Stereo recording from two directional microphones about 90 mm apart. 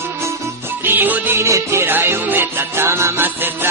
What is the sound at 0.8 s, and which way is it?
Music, 20° right (ahead or behind).